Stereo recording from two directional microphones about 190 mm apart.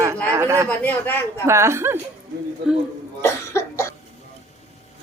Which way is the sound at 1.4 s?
15° right (ahead or behind).